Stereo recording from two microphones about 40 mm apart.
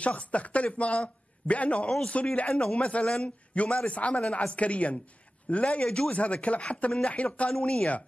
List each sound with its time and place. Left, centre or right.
0.0 s a man's voice: left
1.9 s speech: centre
2.3 s a man's voice: left